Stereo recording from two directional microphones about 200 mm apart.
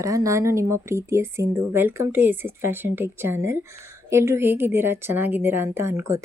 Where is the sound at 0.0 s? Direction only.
15° right (ahead or behind).